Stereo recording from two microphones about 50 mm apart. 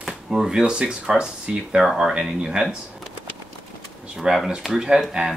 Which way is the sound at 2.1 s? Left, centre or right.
Centre.